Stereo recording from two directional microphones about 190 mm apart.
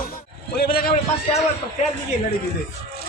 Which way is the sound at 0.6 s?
50° left (ahead or behind).